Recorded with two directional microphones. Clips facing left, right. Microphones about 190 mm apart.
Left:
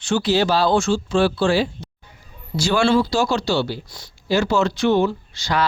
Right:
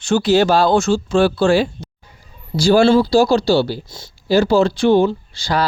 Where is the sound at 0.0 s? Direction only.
45° right (ahead or behind).